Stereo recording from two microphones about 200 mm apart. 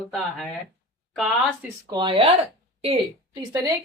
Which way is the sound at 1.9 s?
25° right (ahead or behind).